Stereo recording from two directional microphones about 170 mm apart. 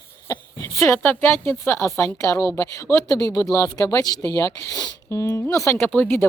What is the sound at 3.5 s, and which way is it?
Speech, 15° left (ahead or behind).